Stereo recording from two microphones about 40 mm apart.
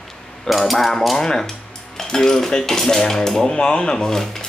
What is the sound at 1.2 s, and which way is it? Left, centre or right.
Cutlery, centre.